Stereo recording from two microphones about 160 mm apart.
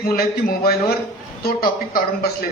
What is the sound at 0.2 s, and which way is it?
Speech, 70° left (ahead or behind).